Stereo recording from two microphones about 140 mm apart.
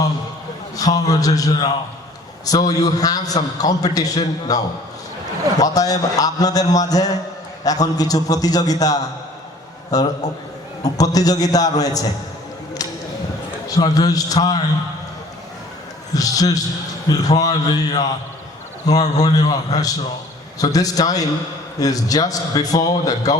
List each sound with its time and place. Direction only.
0.8 s a man's voice: 25° left (ahead or behind)
12.8 s a sound: 25° left (ahead or behind)
13.7 s a man's voice: 25° left (ahead or behind)
16.1 s a man's voice: 25° left (ahead or behind)